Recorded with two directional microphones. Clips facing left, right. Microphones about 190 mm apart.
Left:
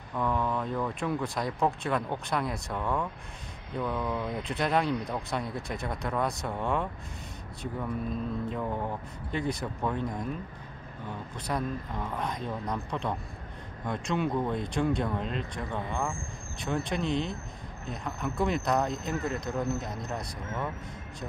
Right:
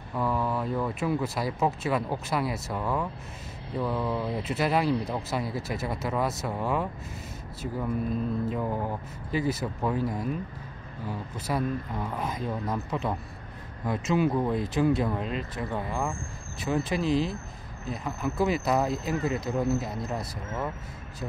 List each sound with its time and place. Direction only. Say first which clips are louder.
0.1 s speech: right 1 dB; 5° right (ahead or behind)